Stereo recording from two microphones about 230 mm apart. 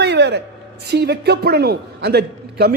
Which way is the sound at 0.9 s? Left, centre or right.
Right.